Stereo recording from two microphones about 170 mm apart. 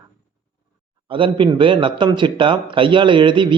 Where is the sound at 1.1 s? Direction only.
30° right (ahead or behind).